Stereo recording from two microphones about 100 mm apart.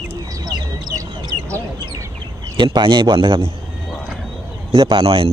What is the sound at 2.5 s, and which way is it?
Speech, 55° right (ahead or behind).